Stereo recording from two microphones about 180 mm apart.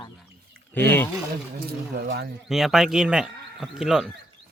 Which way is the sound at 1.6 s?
60° right (ahead or behind).